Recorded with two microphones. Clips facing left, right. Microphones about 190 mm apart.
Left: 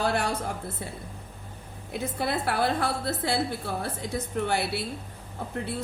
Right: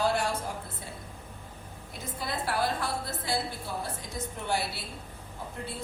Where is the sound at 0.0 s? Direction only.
65° left (ahead or behind).